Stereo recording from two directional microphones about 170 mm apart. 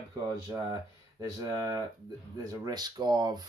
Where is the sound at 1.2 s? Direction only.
20° right (ahead or behind).